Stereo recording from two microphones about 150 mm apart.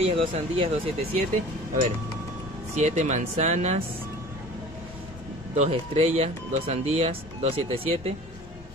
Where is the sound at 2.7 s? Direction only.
50° right (ahead or behind).